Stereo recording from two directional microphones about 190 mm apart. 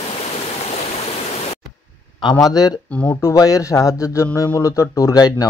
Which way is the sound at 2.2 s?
20° left (ahead or behind).